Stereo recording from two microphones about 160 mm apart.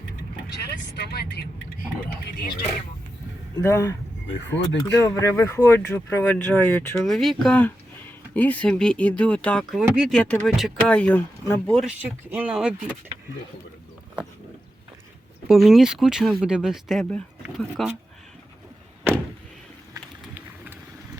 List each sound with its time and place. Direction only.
0.5 s speech: 90° left
2.2 s speech: 75° left (ahead or behind)
3.6 s speech: 20° left (ahead or behind)
7.0 s speech: centre (ahead or behind)
9.8 s speech: 5° right (ahead or behind); by 11.7 s 15° left (ahead or behind)
11.9 s speech: 10° right (ahead or behind)
15.4 s speech: centre (ahead or behind)
19.9 s run: 15° right (ahead or behind)